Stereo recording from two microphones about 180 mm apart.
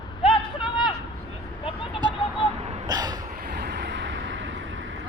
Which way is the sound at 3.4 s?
65° right (ahead or behind).